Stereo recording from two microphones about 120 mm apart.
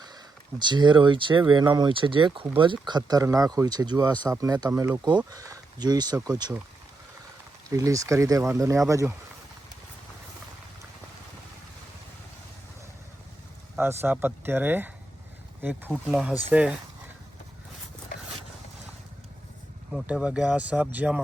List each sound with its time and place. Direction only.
0.6 s speech: 40° right (ahead or behind)
7.7 s speech: 25° right (ahead or behind)
13.7 s speech: 20° right (ahead or behind)
15.9 s speech: 5° right (ahead or behind)
19.9 s speech: 5° right (ahead or behind)